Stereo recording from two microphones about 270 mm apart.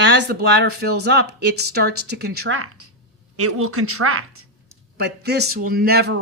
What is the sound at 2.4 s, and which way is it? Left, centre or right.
Speech, right.